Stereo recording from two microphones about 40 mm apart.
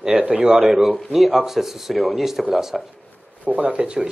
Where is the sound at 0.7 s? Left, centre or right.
Centre.